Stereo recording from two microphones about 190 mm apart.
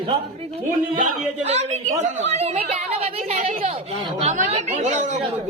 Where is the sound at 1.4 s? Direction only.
35° right (ahead or behind).